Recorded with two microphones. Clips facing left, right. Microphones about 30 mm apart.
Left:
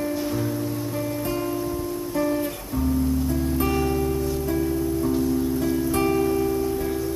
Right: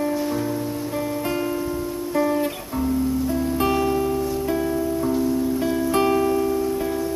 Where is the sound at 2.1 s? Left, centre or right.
Centre.